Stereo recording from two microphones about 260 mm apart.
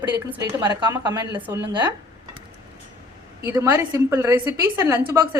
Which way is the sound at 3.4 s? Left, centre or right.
Centre.